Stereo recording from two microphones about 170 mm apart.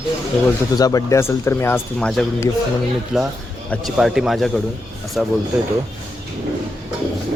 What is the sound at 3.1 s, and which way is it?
A man's voice, 5° right (ahead or behind).